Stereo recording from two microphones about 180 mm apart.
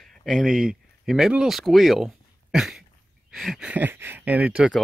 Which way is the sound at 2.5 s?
Centre (ahead or behind).